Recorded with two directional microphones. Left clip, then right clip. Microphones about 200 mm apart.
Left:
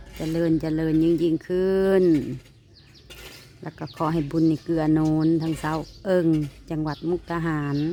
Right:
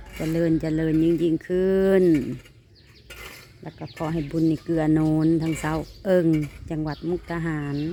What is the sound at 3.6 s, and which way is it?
Speech, 15° left (ahead or behind).